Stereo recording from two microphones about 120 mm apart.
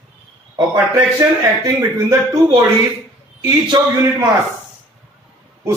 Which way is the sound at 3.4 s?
30° right (ahead or behind).